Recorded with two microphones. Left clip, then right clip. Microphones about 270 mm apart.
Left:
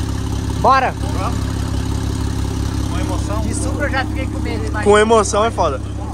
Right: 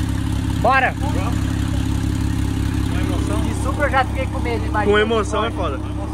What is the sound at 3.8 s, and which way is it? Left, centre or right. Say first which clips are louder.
Speech: right 3 dB; centre.